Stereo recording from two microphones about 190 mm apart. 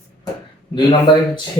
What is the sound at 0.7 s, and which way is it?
Speech, 25° left (ahead or behind).